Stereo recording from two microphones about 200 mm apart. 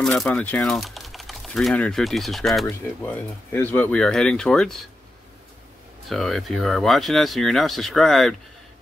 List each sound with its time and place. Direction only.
0.0 s speech: 5° left (ahead or behind)
6.0 s speech: centre (ahead or behind)